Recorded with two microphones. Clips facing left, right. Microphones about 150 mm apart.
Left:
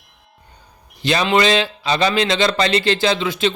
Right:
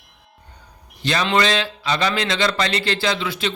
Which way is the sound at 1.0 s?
20° left (ahead or behind).